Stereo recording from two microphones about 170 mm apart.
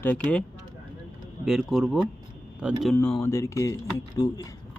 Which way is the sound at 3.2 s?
15° left (ahead or behind).